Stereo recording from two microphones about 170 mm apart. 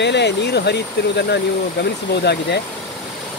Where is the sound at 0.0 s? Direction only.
85° left.